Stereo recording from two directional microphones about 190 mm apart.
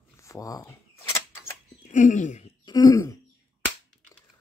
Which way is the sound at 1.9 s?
40° left (ahead or behind).